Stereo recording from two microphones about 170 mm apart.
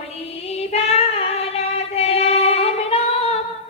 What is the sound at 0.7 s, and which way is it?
Female singing, 35° left (ahead or behind).